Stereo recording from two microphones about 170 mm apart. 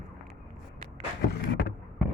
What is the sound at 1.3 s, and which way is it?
Vehicle, 80° left.